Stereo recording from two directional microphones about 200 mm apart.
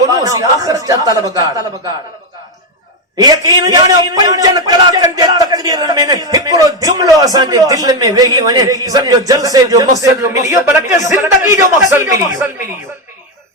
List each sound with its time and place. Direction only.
0.0 s a man's voice: 15° right (ahead or behind)
3.2 s a man's voice: 20° right (ahead or behind)